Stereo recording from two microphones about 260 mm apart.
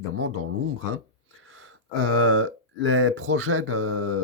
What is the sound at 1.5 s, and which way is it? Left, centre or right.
Speech, right.